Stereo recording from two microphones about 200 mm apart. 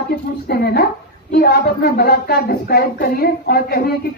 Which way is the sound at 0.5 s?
50° left (ahead or behind).